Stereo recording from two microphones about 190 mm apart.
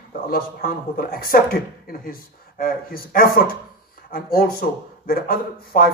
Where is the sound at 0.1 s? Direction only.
50° left (ahead or behind).